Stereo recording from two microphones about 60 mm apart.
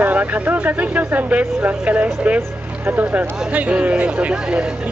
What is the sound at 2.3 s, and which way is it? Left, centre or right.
Speech, right.